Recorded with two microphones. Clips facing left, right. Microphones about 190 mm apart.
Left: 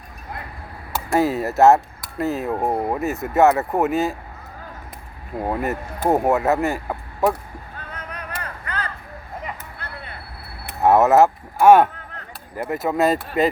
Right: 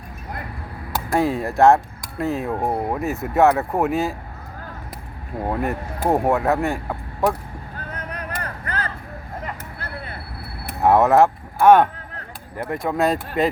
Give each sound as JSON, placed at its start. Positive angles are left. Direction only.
{"t": 1.1, "sound": "speech", "side_deg": 5}
{"t": 5.4, "sound": "speech", "side_deg": 0}
{"t": 8.3, "sound": "vehicle", "side_deg": -40}
{"t": 10.8, "sound": "speech", "side_deg": 0}